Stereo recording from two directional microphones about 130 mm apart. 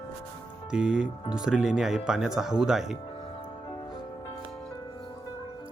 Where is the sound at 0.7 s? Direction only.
5° right (ahead or behind).